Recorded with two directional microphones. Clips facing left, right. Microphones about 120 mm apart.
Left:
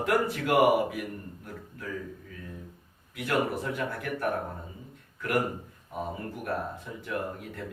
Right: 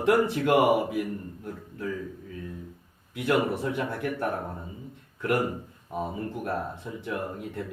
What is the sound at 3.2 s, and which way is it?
Speech, 25° right (ahead or behind).